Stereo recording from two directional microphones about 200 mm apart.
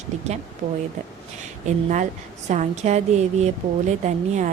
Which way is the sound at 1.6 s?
40° right (ahead or behind).